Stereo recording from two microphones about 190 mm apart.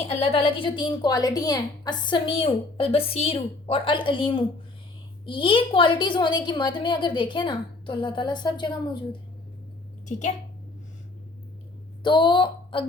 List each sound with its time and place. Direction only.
0.0 s a woman's voice: 30° left (ahead or behind)
10.1 s a woman's voice: 40° left (ahead or behind)
12.0 s speech: 25° left (ahead or behind)